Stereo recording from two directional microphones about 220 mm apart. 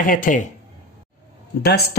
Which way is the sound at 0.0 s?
40° left (ahead or behind).